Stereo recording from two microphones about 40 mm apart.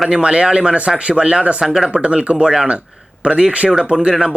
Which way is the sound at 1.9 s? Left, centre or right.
Right.